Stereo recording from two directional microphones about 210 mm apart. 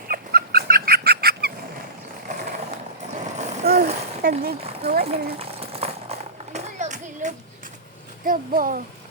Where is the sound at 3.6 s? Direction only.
45° right (ahead or behind).